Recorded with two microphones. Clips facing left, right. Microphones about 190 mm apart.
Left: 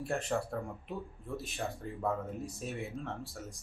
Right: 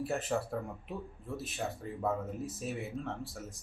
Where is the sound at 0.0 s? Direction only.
Centre (ahead or behind).